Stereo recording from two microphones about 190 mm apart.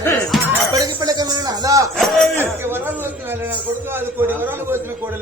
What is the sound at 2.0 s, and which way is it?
Speech, 5° left (ahead or behind).